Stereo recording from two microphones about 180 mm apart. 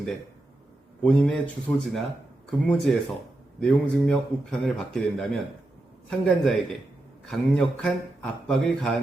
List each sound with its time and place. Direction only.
1.0 s speech: 5° left (ahead or behind)